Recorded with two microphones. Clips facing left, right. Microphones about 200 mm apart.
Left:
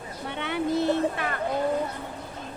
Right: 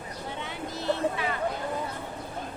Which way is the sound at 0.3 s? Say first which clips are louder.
Left 10 dB; 65° left (ahead or behind).